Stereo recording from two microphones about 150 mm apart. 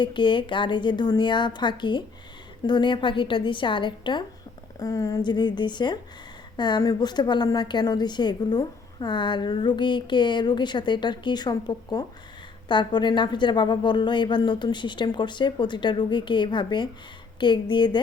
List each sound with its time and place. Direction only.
0.0 s a woman's voice: 30° left (ahead or behind)